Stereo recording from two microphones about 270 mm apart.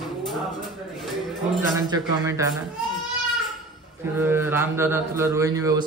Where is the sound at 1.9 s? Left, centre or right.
Centre.